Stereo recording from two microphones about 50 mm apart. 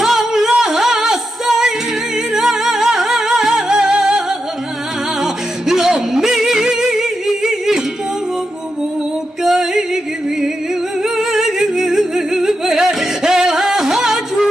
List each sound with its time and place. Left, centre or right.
0.0 s music: centre
3.7 s music: centre
5.2 s music: centre
9.4 s music: centre
11.0 s humming: centre